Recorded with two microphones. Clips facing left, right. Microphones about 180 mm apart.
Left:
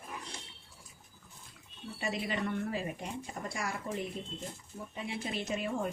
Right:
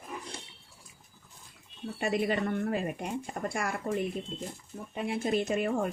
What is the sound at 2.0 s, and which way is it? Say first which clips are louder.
Speech: right 6 dB; 55° right (ahead or behind).